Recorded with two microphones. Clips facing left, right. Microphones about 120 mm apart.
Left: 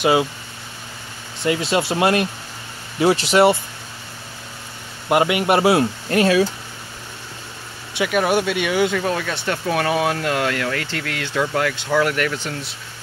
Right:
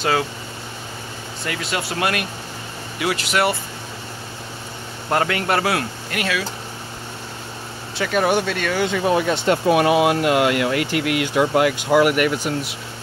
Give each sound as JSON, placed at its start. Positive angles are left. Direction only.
{"t": 0.0, "sound": "speech", "side_deg": 15}
{"t": 1.4, "sound": "speech", "side_deg": 25}
{"t": 5.1, "sound": "speech", "side_deg": 15}
{"t": 7.9, "sound": "vehicle", "side_deg": 10}
{"t": 8.2, "sound": "speech", "side_deg": 5}
{"t": 9.0, "sound": "speech", "side_deg": -20}